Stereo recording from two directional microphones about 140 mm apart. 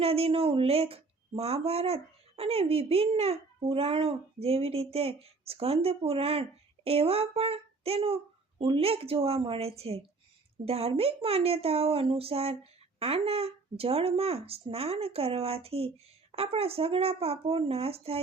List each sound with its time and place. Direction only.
0.0 s speech: 45° right (ahead or behind)